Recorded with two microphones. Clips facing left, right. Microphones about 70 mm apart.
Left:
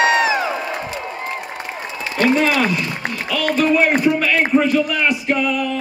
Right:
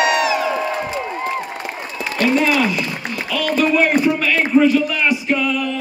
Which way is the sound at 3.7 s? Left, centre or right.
Left.